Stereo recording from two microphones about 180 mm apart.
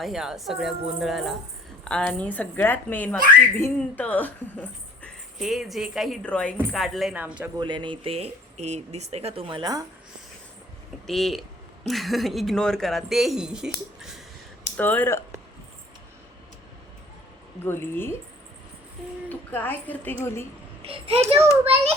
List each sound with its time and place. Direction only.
0.0 s speech: 5° right (ahead or behind)
7.6 s speech: 25° right (ahead or behind)
11.0 s speech: centre (ahead or behind)
14.8 s speech: 10° left (ahead or behind)
17.6 s speech: 10° left (ahead or behind)
19.3 s speech: 10° left (ahead or behind)
20.8 s speech: 30° right (ahead or behind)